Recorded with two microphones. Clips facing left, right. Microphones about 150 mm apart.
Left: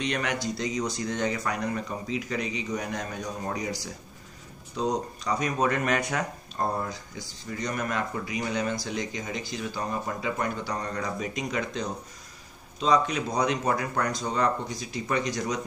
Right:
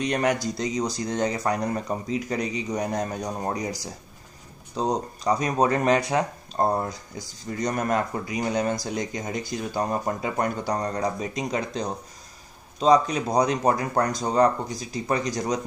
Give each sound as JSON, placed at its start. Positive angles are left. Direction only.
{"t": 0.0, "sound": "speech", "side_deg": -40}